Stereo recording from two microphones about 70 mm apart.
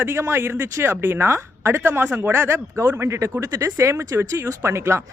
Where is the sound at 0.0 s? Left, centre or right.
Right.